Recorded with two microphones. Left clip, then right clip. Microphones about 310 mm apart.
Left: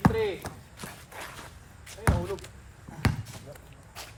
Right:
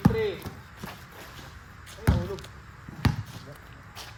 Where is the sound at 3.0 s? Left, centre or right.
Centre.